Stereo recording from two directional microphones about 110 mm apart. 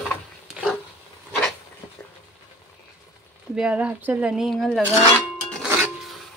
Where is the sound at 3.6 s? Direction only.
10° right (ahead or behind).